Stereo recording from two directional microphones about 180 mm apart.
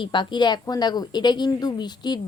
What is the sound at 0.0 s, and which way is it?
A woman's voice, 25° left (ahead or behind).